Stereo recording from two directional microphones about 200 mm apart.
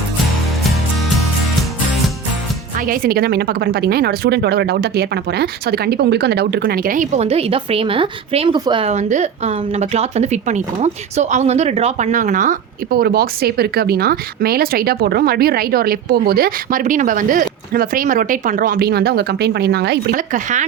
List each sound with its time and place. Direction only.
2.7 s speech: 45° right (ahead or behind)